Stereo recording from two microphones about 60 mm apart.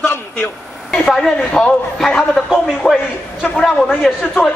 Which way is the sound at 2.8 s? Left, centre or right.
Centre.